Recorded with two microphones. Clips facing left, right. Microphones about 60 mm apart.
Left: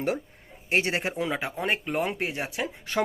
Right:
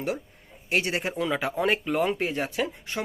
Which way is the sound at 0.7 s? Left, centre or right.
Left.